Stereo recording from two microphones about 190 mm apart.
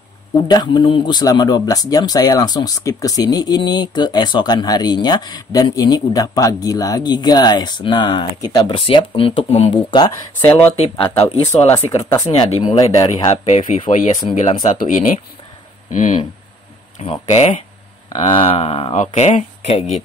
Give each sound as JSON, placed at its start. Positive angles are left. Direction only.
{"t": 0.5, "sound": "speech", "side_deg": 20}
{"t": 11.4, "sound": "speech", "side_deg": 15}
{"t": 12.3, "sound": "speech", "side_deg": 30}
{"t": 13.5, "sound": "speech", "side_deg": 35}
{"t": 14.8, "sound": "speech", "side_deg": 45}
{"t": 17.0, "sound": "speech", "side_deg": 30}